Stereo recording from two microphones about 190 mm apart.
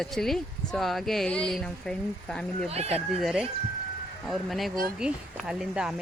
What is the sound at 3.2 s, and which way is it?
Speech, centre (ahead or behind).